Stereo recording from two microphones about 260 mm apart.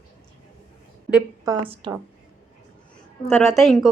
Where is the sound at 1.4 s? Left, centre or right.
Centre.